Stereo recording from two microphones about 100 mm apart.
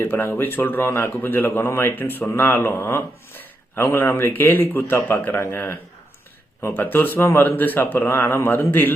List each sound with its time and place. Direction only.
0.0 s speech: 25° left (ahead or behind)